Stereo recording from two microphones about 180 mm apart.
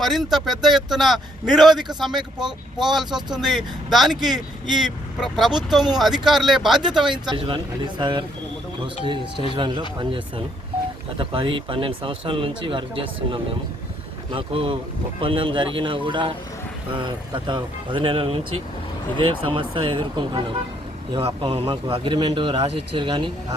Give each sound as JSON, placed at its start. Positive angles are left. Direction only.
{"t": 0.0, "sound": "a man's voice", "side_deg": 0}
{"t": 1.8, "sound": "speech", "side_deg": -25}
{"t": 2.0, "sound": "a man's voice", "side_deg": 0}
{"t": 7.3, "sound": "speech", "side_deg": -30}
{"t": 9.6, "sound": "speech", "side_deg": -25}